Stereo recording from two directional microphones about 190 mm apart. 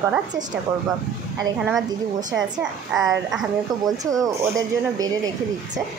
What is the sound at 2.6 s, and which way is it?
Speech, 5° right (ahead or behind).